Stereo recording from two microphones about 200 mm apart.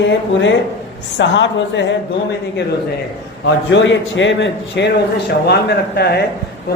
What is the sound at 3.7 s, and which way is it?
A man's voice, 65° left (ahead or behind).